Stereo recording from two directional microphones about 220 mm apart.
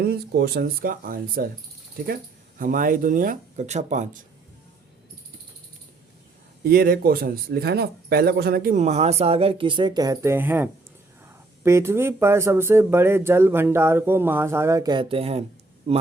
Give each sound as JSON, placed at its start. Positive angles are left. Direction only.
{"t": 0.0, "sound": "speech", "side_deg": -45}
{"t": 2.6, "sound": "speech", "side_deg": -40}
{"t": 6.7, "sound": "speech", "side_deg": -45}